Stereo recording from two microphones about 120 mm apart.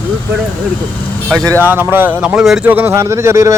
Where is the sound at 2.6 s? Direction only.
15° right (ahead or behind).